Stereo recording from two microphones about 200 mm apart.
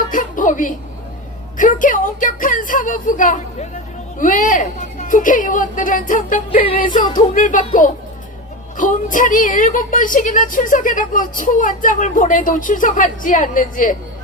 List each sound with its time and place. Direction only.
0.1 s a sound: 40° left (ahead or behind)
4.2 s speech: 40° left (ahead or behind)
8.8 s speech: 40° left (ahead or behind)